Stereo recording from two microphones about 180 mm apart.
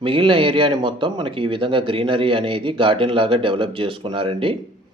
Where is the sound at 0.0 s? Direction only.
30° right (ahead or behind).